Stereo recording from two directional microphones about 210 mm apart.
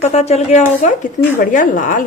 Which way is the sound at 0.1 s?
30° left (ahead or behind).